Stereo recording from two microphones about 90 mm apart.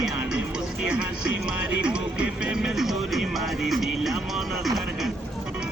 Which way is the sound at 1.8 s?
15° right (ahead or behind).